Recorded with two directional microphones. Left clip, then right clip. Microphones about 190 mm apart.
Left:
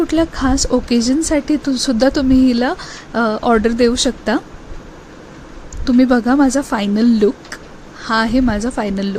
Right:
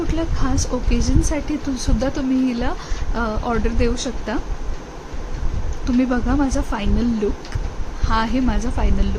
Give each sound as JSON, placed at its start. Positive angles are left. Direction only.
{"t": 0.1, "sound": "speech", "side_deg": 35}
{"t": 5.8, "sound": "speech", "side_deg": 35}